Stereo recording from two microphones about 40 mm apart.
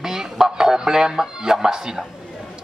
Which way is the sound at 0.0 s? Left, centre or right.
Centre.